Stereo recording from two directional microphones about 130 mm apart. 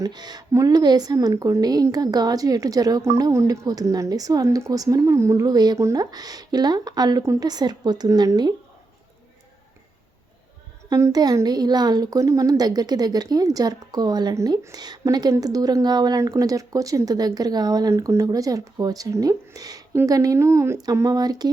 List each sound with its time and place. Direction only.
0.0 s a woman's voice: 30° right (ahead or behind)
10.8 s a woman's voice: 25° right (ahead or behind)